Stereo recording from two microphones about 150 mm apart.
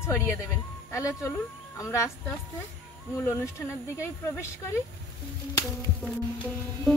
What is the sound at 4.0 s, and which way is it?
Speech, 20° left (ahead or behind).